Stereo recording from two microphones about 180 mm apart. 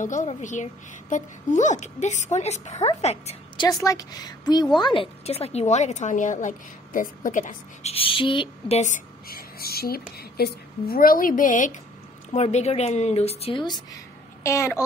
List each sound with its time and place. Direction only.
0.0 s a woman's voice: 45° left (ahead or behind)
3.5 s a woman's voice: 20° left (ahead or behind)
14.4 s a child's voice: 15° left (ahead or behind)